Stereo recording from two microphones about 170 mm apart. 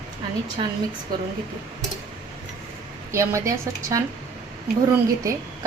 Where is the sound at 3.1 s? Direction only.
15° right (ahead or behind).